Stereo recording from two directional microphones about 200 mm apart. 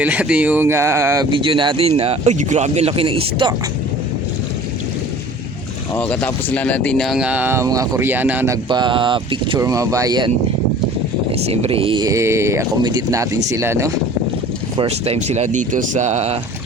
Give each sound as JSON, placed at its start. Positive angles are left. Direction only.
{"t": 0.0, "sound": "speech", "side_deg": -5}
{"t": 1.3, "sound": "speech", "side_deg": -25}
{"t": 5.9, "sound": "speech", "side_deg": 5}
{"t": 8.7, "sound": "speech", "side_deg": -25}
{"t": 11.4, "sound": "speech", "side_deg": -30}
{"t": 14.8, "sound": "speech", "side_deg": -30}